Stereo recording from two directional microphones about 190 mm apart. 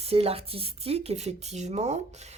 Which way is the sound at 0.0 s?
30° right (ahead or behind).